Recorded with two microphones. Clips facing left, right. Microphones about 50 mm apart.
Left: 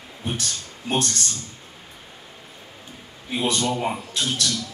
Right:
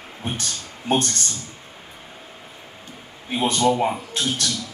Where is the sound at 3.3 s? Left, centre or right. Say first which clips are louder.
Right 4 dB; right.